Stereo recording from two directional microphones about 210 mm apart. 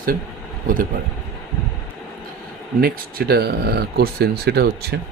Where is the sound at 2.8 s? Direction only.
45° right (ahead or behind).